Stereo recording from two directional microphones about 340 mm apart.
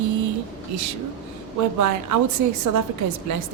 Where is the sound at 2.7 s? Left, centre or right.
Right.